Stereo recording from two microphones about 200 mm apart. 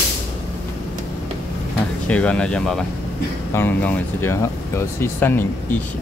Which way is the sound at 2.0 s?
5° left (ahead or behind).